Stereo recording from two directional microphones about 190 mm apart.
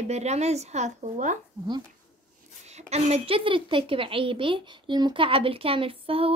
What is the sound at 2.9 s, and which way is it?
Speech, 30° right (ahead or behind).